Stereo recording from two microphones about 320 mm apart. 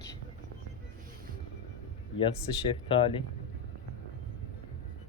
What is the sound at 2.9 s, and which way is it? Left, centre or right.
Speech, centre.